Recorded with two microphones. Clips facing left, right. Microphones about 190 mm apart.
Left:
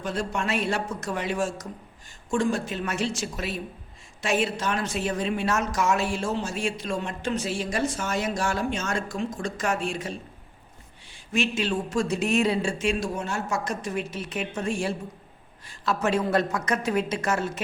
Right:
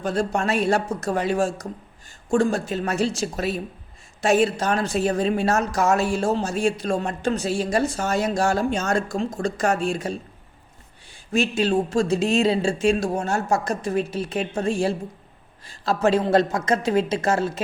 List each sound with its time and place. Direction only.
0.0 s speech: 40° right (ahead or behind)
11.3 s a woman's voice: 40° right (ahead or behind)